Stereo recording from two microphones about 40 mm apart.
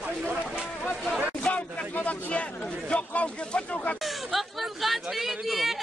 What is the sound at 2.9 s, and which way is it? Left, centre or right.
Speech, left.